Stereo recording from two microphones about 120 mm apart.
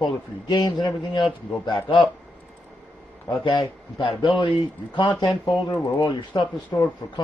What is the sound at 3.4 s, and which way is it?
Speech, 40° left (ahead or behind).